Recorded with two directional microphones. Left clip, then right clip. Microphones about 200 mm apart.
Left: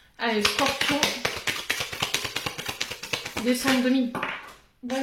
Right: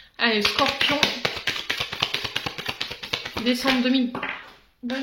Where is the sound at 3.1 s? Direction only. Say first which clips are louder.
Right 2 dB; 30° right (ahead or behind).